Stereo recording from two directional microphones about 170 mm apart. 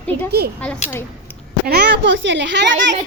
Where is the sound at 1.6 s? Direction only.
75° right (ahead or behind); by 2.9 s 90° right.